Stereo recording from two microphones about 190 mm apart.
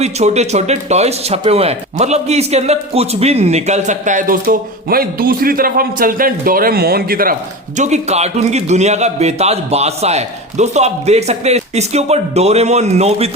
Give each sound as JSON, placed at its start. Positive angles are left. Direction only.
{"t": 0.0, "sound": "speech", "side_deg": -35}
{"t": 7.8, "sound": "speech", "side_deg": -35}